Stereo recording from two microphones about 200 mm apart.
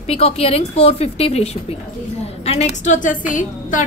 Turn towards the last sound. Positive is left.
turn(degrees=40)  # may be behind; listen again after turning